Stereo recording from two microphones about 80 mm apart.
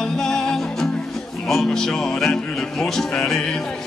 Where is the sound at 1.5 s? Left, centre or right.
Centre.